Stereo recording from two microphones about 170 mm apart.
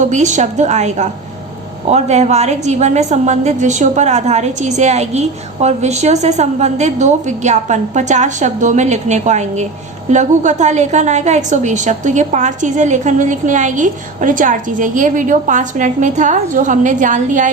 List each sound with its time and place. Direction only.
0.1 s a woman's voice: 45° right (ahead or behind)